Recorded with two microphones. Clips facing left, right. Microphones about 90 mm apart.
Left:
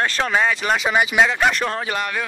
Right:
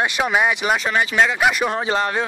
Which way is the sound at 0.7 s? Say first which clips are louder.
Left 1 dB; 10° left (ahead or behind).